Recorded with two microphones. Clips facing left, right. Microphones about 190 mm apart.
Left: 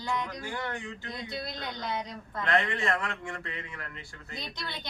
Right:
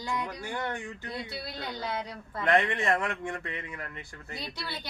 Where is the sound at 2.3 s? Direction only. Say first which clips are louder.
Right 3 dB; 20° right (ahead or behind).